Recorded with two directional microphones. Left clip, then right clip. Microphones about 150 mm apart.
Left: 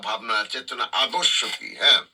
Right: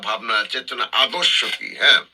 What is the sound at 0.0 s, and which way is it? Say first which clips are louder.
Speech: right 4 dB; 25° right (ahead or behind).